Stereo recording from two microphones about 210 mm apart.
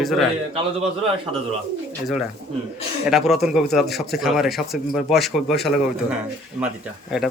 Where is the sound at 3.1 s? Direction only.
Centre (ahead or behind).